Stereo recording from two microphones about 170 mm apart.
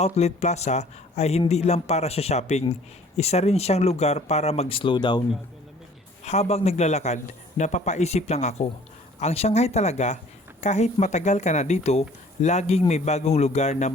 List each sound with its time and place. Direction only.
0.0 s speech: 40° left (ahead or behind)
6.2 s speech: 40° left (ahead or behind)